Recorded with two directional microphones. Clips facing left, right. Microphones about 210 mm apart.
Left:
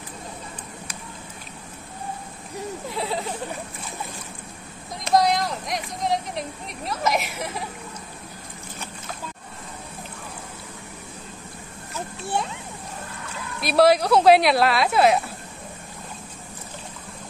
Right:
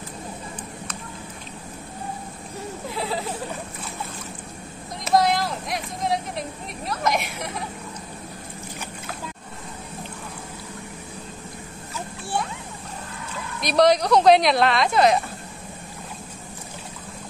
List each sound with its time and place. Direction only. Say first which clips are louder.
2.9 s speech: right 1 dB; centre (ahead or behind)
5.0 s speech: even; centre (ahead or behind)
13.6 s speech: left 1 dB; 5° left (ahead or behind)